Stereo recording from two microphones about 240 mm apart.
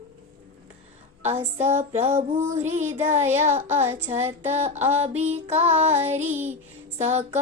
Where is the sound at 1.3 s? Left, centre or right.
Right.